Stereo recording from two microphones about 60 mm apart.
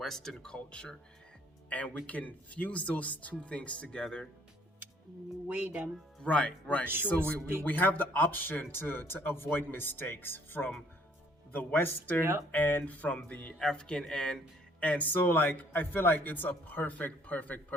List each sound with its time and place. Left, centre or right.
0.0 s speech: centre
5.5 s speech: right
6.2 s speech: left
6.8 s speech: right
7.6 s speech: left
13.6 s speech: centre
15.3 s speech: left